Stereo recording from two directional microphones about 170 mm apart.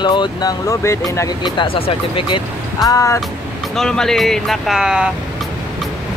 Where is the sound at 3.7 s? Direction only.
5° left (ahead or behind).